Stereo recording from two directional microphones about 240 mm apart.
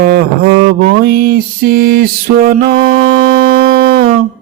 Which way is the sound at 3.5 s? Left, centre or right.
Right.